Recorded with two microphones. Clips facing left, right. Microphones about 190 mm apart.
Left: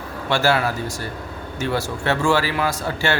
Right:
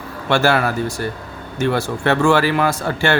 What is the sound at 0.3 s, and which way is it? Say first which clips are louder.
Speech: right 3 dB; 55° right (ahead or behind).